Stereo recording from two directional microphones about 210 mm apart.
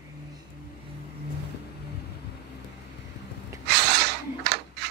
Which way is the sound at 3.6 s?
55° right (ahead or behind).